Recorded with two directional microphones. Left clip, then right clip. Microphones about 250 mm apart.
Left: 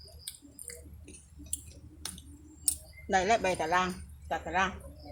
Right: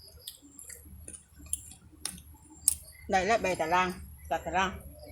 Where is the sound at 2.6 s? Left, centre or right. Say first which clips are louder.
Right 2 dB; centre.